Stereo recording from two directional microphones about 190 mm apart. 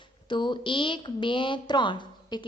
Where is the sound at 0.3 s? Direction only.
25° left (ahead or behind).